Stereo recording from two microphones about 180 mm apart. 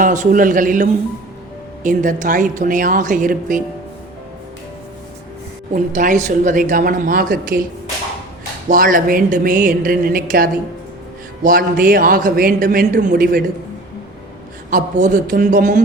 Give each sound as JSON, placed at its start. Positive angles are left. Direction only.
{"t": 0.0, "sound": "a man's voice", "side_deg": -45}
{"t": 5.7, "sound": "a man's voice", "side_deg": -45}
{"t": 8.7, "sound": "a man's voice", "side_deg": -50}
{"t": 14.7, "sound": "a man's voice", "side_deg": -45}